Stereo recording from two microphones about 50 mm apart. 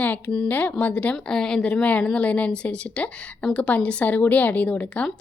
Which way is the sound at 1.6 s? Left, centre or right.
Left.